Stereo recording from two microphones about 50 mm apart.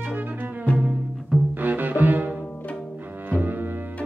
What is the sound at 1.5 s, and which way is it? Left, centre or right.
Music, right.